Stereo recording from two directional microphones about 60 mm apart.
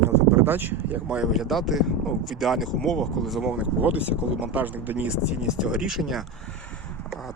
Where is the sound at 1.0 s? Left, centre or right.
Centre.